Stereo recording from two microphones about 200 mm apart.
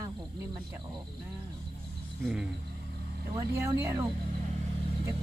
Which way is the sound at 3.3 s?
15° right (ahead or behind).